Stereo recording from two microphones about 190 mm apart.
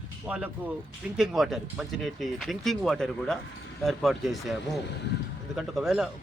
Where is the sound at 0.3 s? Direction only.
10° right (ahead or behind).